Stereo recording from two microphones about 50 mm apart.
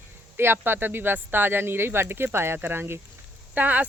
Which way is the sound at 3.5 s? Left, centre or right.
Right.